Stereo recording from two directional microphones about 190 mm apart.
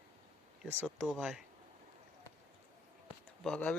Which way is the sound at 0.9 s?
Centre (ahead or behind).